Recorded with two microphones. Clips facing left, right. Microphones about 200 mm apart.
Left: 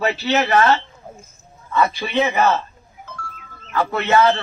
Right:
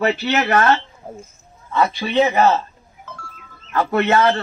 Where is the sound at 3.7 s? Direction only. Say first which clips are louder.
Right 3 dB; 55° right (ahead or behind).